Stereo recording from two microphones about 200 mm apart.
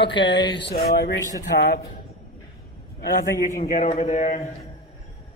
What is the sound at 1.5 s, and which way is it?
Speech, 50° left (ahead or behind).